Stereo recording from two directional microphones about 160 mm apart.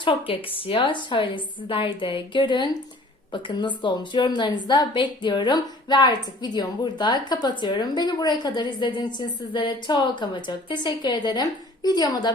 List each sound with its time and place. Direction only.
0.0 s a woman's voice: 35° left (ahead or behind)